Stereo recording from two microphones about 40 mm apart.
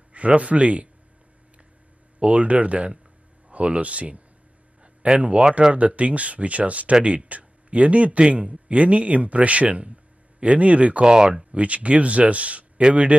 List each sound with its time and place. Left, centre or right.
0.1 s speech: right
2.1 s speech: right
11.1 s speech: centre
11.5 s speech: right